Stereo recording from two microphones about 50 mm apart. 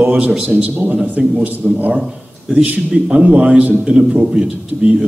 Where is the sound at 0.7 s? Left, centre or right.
Right.